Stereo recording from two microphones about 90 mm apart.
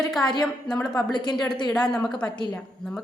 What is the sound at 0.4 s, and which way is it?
Speech, 5° left (ahead or behind).